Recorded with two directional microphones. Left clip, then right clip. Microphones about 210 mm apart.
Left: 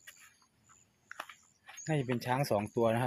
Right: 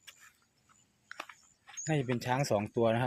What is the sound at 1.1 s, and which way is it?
Chewing, centre (ahead or behind).